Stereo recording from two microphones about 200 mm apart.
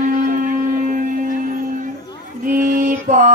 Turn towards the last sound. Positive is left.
turn(degrees=-40)  # may be behind; listen again after turning